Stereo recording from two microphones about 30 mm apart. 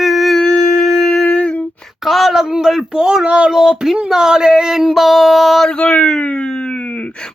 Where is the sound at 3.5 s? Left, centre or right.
Centre.